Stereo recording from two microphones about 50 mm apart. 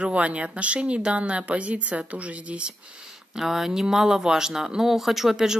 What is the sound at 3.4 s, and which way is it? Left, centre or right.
Speech, centre.